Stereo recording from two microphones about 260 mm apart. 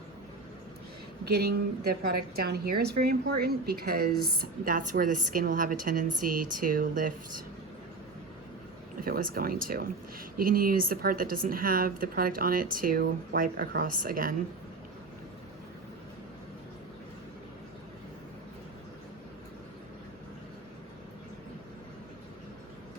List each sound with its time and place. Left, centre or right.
1.2 s speech: right
9.0 s speech: right